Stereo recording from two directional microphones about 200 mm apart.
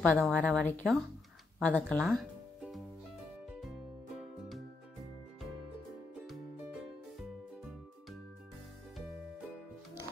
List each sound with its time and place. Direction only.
0.0 s speech: 5° left (ahead or behind)
3.4 s music: centre (ahead or behind)
6.2 s music: centre (ahead or behind)